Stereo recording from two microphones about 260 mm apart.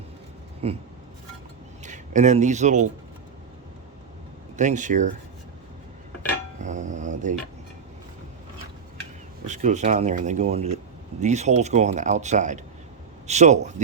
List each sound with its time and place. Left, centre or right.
0.6 s speech: right
1.8 s speech: right
4.5 s speech: right
6.6 s music: right
9.5 s speech: right